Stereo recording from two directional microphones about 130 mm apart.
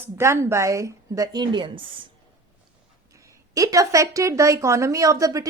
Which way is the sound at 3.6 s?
25° right (ahead or behind).